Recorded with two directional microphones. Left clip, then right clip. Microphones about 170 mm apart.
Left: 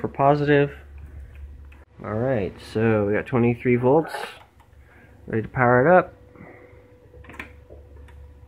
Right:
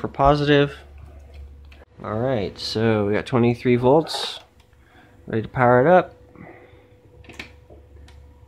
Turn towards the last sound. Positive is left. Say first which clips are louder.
# right 2 dB
turn(degrees=-30)  # may be behind; listen again after turning